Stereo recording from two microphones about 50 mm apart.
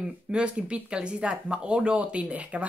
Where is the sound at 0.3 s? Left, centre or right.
Right.